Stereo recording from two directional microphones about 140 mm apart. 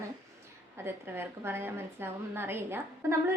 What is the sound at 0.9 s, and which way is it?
A woman's voice, 15° right (ahead or behind).